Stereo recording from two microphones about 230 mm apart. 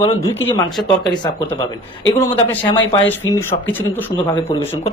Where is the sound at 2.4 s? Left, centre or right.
Centre.